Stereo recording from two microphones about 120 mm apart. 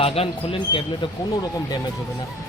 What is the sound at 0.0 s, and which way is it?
Speech, 55° left (ahead or behind).